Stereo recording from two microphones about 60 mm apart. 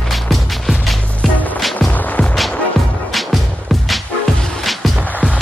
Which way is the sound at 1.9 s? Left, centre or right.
Left.